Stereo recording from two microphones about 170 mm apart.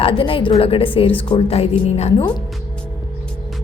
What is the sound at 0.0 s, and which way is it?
A woman's voice, 30° left (ahead or behind).